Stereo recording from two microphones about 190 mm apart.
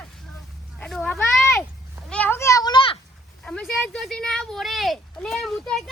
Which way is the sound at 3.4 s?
5° left (ahead or behind).